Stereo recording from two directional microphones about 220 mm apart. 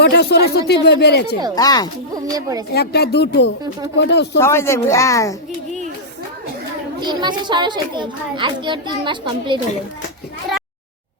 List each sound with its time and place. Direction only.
0.0 s speech: 50° left (ahead or behind)
1.5 s a woman's voice: 15° left (ahead or behind)
2.1 s speech: 15° right (ahead or behind)
2.7 s speech: 45° left (ahead or behind)
4.4 s a woman's voice: 10° left (ahead or behind)
7.0 s a child's voice: 20° right (ahead or behind)